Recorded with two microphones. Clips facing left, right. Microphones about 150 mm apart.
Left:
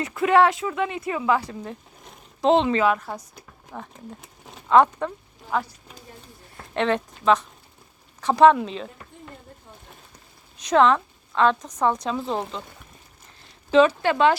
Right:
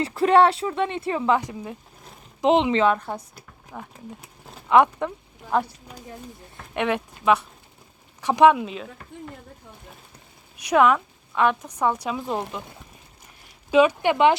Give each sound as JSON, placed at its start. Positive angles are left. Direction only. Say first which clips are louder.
{"t": 0.0, "sound": "a woman's voice", "louder": "right 1 dB", "side_deg": -30}
{"t": 2.8, "sound": "a woman's voice", "louder": "right 1 dB", "side_deg": 5}
{"t": 3.3, "sound": "speech", "louder": "left 1 dB", "side_deg": -5}
{"t": 10.6, "sound": "speech", "louder": "even", "side_deg": -10}
{"t": 13.4, "sound": "speech", "louder": "left 1 dB", "side_deg": -10}